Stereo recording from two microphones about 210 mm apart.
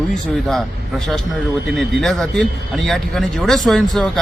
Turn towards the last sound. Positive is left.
turn(degrees=0)  # may be behind; listen again after turning